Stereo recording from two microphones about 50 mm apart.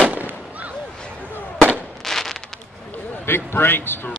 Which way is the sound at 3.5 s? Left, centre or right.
Left.